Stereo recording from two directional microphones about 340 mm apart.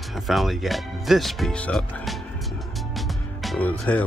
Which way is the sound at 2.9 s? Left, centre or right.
Centre.